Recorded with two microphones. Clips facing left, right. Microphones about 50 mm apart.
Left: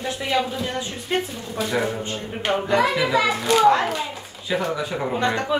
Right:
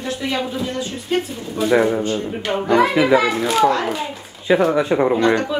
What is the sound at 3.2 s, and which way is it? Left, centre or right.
Speech, centre.